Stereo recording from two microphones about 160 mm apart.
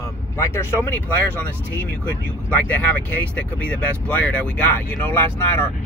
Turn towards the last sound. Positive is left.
turn(degrees=15)  # may be behind; listen again after turning